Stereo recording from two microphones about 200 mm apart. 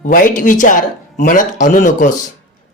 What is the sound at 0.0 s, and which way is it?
Speech, 45° left (ahead or behind).